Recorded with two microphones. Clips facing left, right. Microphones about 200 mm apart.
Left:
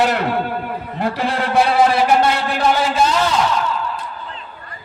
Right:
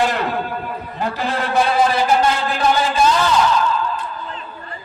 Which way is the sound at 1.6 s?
75° left (ahead or behind).